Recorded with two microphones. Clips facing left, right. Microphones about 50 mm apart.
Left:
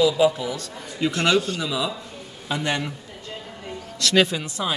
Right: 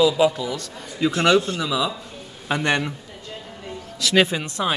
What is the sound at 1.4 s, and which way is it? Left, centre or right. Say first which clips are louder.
Speech: right 2 dB; centre.